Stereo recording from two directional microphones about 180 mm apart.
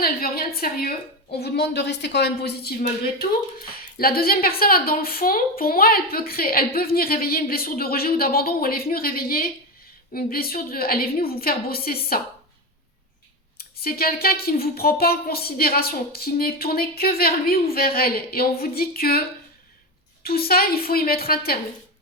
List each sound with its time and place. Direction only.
0.0 s a woman's voice: 55° left (ahead or behind)
13.6 s a woman's voice: 55° left (ahead or behind)
20.2 s a woman's voice: 55° left (ahead or behind)